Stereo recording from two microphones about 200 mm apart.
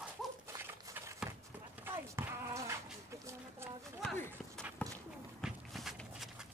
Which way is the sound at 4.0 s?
5° left (ahead or behind).